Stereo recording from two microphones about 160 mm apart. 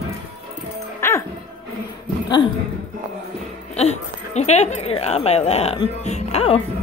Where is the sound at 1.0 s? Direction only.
20° left (ahead or behind).